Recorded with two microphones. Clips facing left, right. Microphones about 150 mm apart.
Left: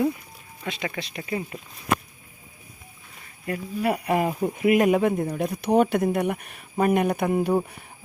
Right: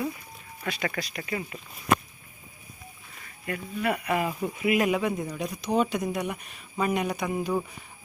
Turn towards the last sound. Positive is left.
turn(degrees=55)  # may be behind; listen again after turning